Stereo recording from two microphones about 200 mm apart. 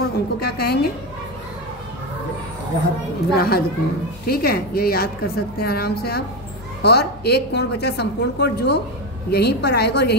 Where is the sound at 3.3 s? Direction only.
50° left (ahead or behind).